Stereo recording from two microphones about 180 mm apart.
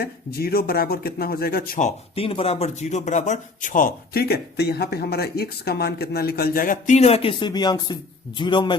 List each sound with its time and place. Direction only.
0.0 s speech: 60° left (ahead or behind)
2.1 s a man's voice: 30° left (ahead or behind)